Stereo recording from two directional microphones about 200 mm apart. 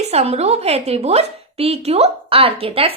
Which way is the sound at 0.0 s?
30° right (ahead or behind).